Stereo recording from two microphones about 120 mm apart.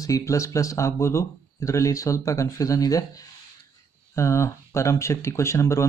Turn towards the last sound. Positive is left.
turn(degrees=25)  # may be behind; listen again after turning